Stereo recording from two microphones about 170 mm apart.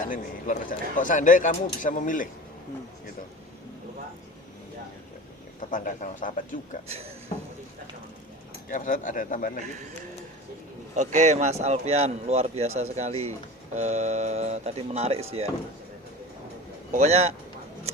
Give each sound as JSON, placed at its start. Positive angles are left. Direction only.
{"t": 0.0, "sound": "a man's voice", "side_deg": 50}
{"t": 5.5, "sound": "a man's voice", "side_deg": 50}
{"t": 6.8, "sound": "speech", "side_deg": -35}
{"t": 8.7, "sound": "a man's voice", "side_deg": 50}
{"t": 10.9, "sound": "speech", "side_deg": -45}
{"t": 16.9, "sound": "speech", "side_deg": -40}